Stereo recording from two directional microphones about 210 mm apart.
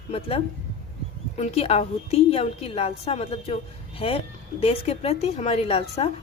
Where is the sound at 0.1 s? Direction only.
30° left (ahead or behind).